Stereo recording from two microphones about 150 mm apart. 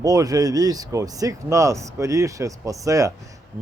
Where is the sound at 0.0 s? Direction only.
25° right (ahead or behind).